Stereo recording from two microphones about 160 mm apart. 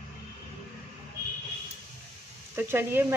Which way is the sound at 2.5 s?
15° right (ahead or behind).